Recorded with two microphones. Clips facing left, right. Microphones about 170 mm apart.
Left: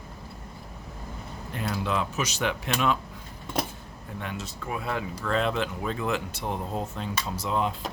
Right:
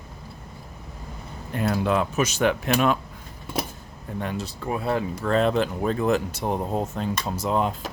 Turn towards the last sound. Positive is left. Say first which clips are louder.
# right 4 dB
turn(degrees=-45)  # may be behind; listen again after turning